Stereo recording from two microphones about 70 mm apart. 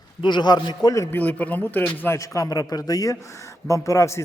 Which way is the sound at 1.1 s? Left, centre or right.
Left.